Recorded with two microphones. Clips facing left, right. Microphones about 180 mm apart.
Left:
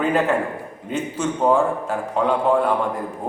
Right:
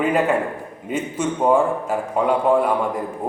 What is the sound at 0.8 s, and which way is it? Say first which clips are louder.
A man's voice: right 1 dB; 10° right (ahead or behind).